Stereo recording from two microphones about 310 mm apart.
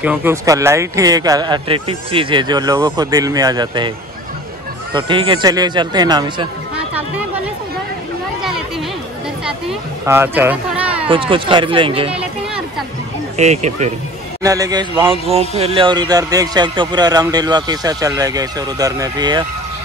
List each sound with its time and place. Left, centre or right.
0.0 s speech: centre
4.9 s speech: centre
6.9 s a sound: centre
9.4 s speech: centre
11.1 s speech: centre
12.1 s a sound: centre
13.4 s speech: right
14.4 s speech: centre